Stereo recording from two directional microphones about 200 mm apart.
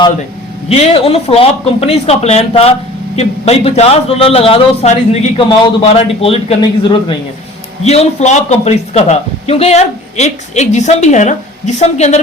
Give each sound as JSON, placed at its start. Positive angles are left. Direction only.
{"t": 0.7, "sound": "a man's voice", "side_deg": 30}
{"t": 7.9, "sound": "a man's voice", "side_deg": 35}